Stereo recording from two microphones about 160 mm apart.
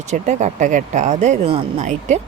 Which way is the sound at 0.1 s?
45° right (ahead or behind).